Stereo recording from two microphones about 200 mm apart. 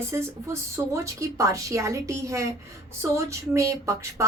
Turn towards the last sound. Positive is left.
turn(degrees=-15)  # may be behind; listen again after turning